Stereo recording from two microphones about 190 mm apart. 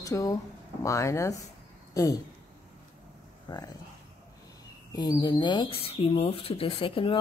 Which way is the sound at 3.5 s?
20° left (ahead or behind).